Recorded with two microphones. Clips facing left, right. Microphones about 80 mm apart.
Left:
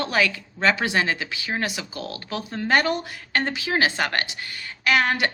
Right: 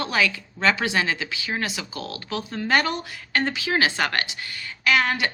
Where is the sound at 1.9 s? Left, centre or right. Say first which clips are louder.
Even; right.